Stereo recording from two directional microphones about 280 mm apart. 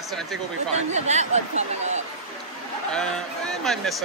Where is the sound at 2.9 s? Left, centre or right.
Centre.